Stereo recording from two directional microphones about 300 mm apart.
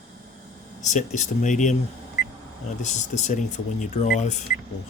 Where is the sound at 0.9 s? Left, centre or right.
Left.